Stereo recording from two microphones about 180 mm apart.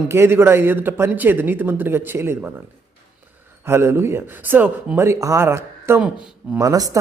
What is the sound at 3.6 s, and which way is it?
A man's voice, 15° right (ahead or behind).